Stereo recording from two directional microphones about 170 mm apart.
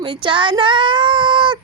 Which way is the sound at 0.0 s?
30° right (ahead or behind).